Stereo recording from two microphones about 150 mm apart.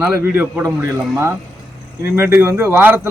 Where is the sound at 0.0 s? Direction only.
15° right (ahead or behind).